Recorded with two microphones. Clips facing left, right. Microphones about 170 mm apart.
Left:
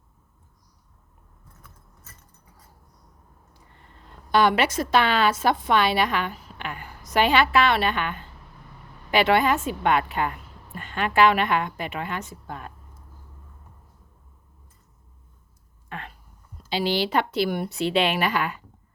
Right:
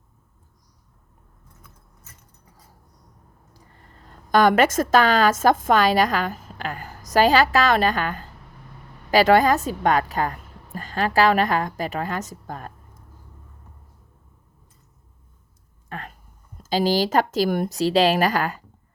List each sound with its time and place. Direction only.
3.5 s a woman's voice: 40° right (ahead or behind)
15.9 s a sound: 40° right (ahead or behind)
16.6 s a woman's voice: 40° right (ahead or behind)